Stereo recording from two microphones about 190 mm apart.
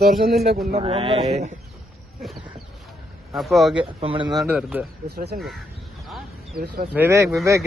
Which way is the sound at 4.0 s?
30° right (ahead or behind).